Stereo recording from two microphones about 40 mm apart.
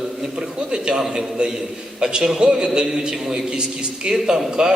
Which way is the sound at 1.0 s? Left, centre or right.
Centre.